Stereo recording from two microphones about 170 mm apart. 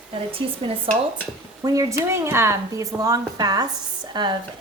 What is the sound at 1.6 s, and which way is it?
A woman's voice, 20° right (ahead or behind).